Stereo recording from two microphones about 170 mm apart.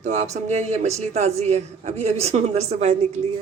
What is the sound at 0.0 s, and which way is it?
A woman's voice, 45° right (ahead or behind).